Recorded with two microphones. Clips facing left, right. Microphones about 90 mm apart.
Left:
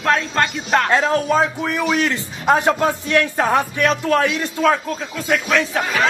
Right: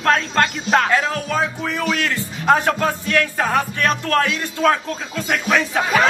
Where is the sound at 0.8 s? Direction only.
25° left (ahead or behind).